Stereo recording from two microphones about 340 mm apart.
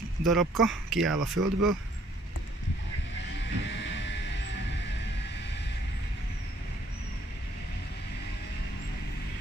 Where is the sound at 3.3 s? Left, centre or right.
Left.